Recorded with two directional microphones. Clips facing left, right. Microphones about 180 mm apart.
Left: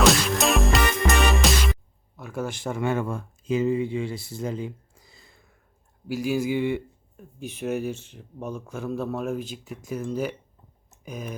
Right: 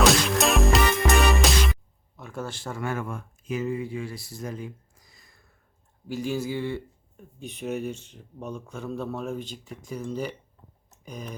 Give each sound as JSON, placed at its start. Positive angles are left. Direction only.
{"t": 0.0, "sound": "music", "side_deg": 0}
{"t": 2.1, "sound": "speech", "side_deg": 5}
{"t": 6.1, "sound": "speech", "side_deg": 10}
{"t": 7.4, "sound": "a man's voice", "side_deg": 0}
{"t": 11.0, "sound": "tick-tock", "side_deg": 5}